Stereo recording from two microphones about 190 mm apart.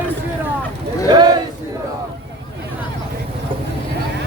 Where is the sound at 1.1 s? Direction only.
20° right (ahead or behind).